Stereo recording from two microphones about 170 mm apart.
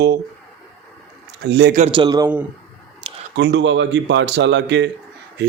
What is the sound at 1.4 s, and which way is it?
Speech, 90° right.